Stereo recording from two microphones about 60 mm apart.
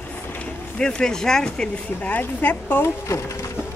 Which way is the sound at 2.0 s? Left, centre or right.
Left.